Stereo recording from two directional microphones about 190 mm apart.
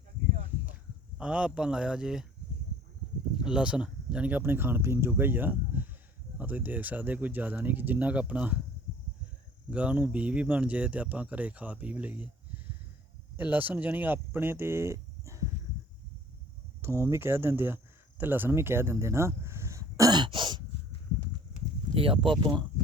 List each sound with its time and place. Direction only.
1.2 s speech: 5° right (ahead or behind)
3.4 s speech: 5° right (ahead or behind)
9.6 s speech: 5° right (ahead or behind)
13.3 s speech: 10° right (ahead or behind)
16.8 s speech: 15° right (ahead or behind)
18.2 s a sound: 10° right (ahead or behind)
21.9 s speech: 30° right (ahead or behind)